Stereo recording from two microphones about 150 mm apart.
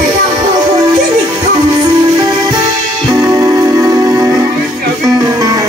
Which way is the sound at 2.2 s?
25° right (ahead or behind).